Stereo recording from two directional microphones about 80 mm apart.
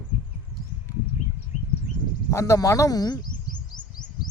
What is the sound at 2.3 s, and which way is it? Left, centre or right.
Speech, left.